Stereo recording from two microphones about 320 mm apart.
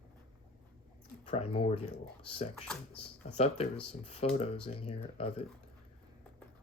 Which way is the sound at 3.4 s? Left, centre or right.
Centre.